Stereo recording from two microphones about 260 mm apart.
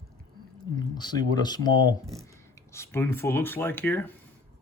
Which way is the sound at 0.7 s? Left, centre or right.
Centre.